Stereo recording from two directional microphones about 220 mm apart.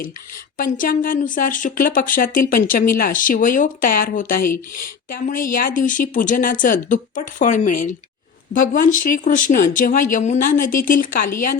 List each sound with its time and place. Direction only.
0.5 s speech: 40° left (ahead or behind)